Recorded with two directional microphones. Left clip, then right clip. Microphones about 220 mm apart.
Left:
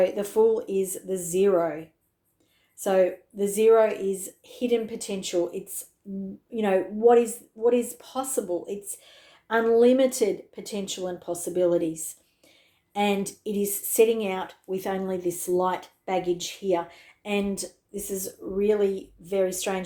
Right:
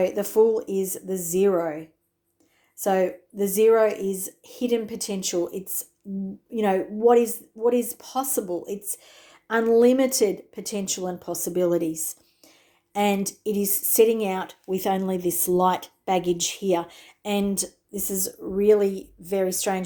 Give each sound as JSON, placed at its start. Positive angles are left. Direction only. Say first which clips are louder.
{"t": 0.0, "sound": "a woman's voice", "louder": "right 1 dB", "side_deg": -25}